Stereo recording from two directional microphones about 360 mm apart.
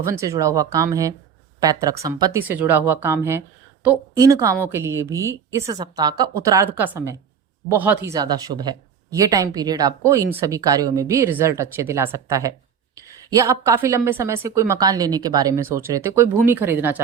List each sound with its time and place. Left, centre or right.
0.0 s a woman's voice: centre